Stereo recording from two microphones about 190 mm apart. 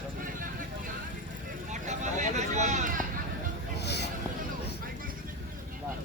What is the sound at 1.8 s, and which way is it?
Vehicle, 40° right (ahead or behind).